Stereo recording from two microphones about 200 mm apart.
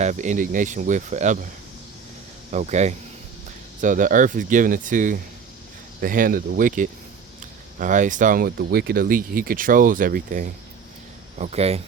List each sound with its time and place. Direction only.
0.0 s speech: 35° right (ahead or behind)
2.5 s speech: 35° right (ahead or behind)